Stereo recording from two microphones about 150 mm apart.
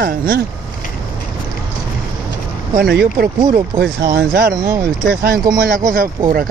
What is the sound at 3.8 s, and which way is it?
Speech, 90° right.